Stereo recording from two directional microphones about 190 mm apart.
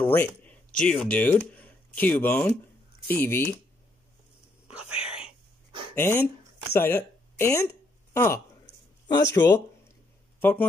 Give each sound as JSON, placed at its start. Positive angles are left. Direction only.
{"t": 0.0, "sound": "speech", "side_deg": 10}
{"t": 4.6, "sound": "whispering", "side_deg": -5}
{"t": 5.9, "sound": "speech", "side_deg": 10}
{"t": 10.4, "sound": "speech", "side_deg": 10}